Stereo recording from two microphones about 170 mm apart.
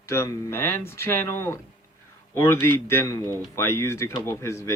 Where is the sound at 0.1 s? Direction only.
15° left (ahead or behind).